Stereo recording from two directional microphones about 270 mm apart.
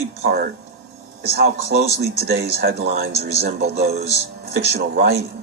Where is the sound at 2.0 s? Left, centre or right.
Right.